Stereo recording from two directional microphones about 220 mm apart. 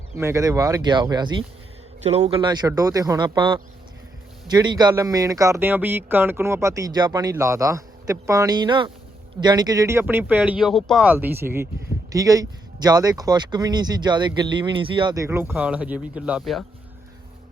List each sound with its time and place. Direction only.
0.2 s speech: 15° right (ahead or behind)